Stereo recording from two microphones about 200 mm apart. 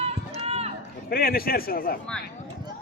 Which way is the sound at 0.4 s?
30° right (ahead or behind).